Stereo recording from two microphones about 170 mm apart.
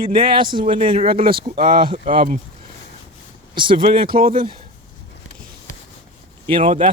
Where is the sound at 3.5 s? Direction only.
30° right (ahead or behind).